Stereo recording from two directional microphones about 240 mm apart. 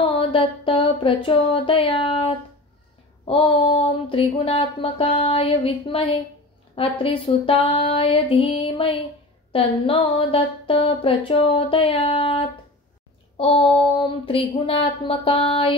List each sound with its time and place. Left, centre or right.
0.1 s speech: left